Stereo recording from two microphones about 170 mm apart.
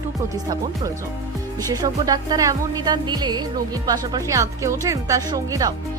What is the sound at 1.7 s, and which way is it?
Speech, 20° right (ahead or behind).